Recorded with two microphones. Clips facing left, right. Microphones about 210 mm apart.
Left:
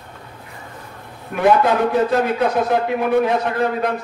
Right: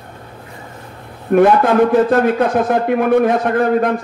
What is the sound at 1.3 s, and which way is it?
A man's voice, 50° right (ahead or behind).